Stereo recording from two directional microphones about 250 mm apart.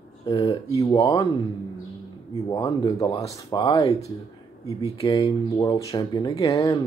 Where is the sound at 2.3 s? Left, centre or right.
Centre.